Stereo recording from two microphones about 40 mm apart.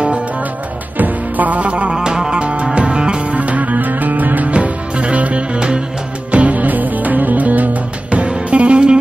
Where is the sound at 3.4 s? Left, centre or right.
Right.